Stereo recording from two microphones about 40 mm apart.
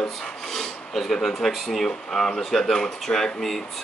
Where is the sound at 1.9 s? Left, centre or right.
Centre.